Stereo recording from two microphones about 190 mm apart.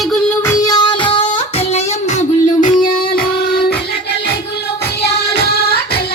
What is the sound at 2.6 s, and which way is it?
Music, 45° left (ahead or behind).